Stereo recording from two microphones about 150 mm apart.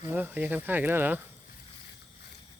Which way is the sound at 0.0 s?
15° right (ahead or behind).